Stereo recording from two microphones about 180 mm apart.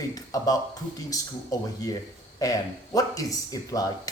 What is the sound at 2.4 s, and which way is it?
A man's voice, 20° left (ahead or behind).